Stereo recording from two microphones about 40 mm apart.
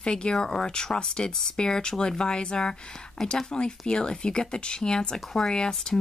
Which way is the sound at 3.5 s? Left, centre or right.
Left.